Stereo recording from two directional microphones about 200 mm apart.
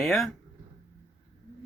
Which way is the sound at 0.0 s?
Centre (ahead or behind).